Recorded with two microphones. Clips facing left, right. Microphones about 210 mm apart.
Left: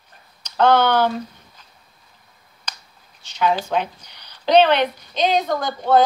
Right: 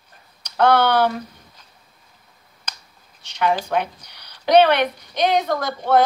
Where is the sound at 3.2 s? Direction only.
60° right (ahead or behind).